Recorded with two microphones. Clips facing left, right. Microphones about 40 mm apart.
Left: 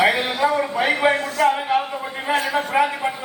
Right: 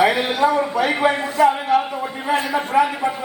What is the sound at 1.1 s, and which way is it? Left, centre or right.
Speech, right.